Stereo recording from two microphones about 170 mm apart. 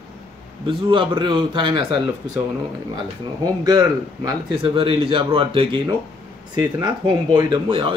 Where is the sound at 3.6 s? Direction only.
20° right (ahead or behind).